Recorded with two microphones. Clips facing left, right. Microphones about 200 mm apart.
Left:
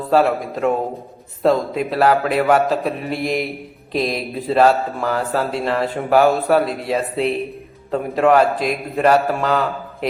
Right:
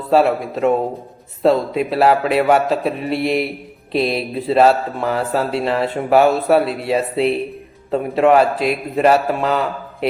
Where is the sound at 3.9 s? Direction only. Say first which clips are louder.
Right 3 dB; 30° right (ahead or behind).